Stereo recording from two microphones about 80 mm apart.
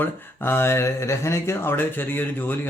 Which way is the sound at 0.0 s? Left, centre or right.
Left.